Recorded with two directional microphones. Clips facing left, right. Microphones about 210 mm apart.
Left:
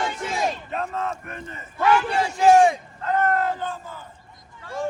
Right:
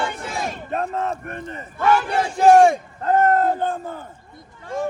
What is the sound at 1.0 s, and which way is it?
Speech, 35° right (ahead or behind).